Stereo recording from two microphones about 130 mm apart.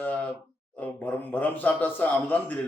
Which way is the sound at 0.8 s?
10° left (ahead or behind).